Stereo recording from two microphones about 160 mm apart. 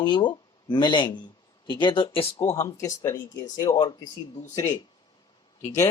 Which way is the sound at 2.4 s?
20° left (ahead or behind).